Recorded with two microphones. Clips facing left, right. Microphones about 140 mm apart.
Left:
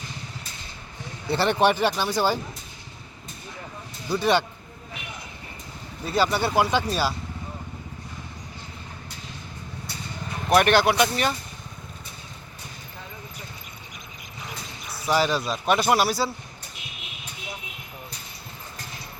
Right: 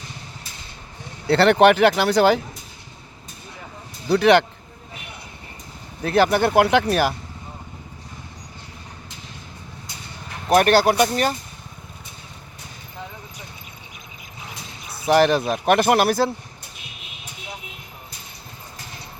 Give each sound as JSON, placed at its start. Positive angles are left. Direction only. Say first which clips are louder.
{"t": 1.3, "sound": "speech", "louder": "right 7 dB", "side_deg": -75}
{"t": 4.1, "sound": "speech", "louder": "right 7 dB", "side_deg": -75}
{"t": 6.0, "sound": "speech", "louder": "right 6 dB", "side_deg": -65}
{"t": 10.5, "sound": "speech", "louder": "right 3 dB", "side_deg": -40}
{"t": 15.0, "sound": "speech", "louder": "right 6 dB", "side_deg": -55}